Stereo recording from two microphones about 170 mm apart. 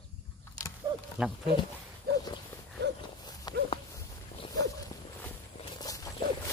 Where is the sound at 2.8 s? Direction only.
90° right.